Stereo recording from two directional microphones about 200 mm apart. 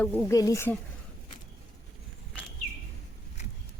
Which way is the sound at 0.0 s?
15° left (ahead or behind).